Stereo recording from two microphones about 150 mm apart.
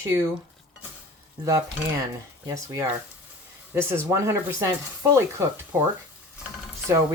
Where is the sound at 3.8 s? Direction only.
15° right (ahead or behind).